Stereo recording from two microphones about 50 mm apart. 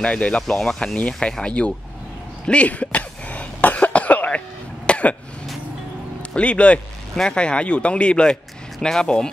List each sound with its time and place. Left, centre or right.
0.0 s speech: left
0.9 s speech: left
2.4 s cough: left
6.3 s speech: left